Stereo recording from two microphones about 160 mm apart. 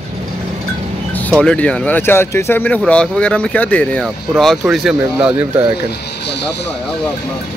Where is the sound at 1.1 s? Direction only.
10° left (ahead or behind).